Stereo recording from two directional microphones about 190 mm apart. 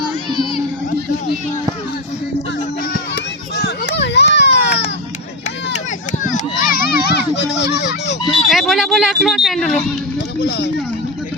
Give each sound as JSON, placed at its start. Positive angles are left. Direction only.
{"t": 3.5, "sound": "a sound", "side_deg": 60}
{"t": 5.7, "sound": "children playing", "side_deg": 40}
{"t": 8.3, "sound": "speech", "side_deg": 0}